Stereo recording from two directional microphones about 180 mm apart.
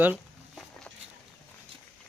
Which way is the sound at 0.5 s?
5° left (ahead or behind).